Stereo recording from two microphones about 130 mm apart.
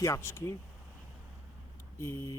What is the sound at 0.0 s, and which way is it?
Speech, 20° left (ahead or behind).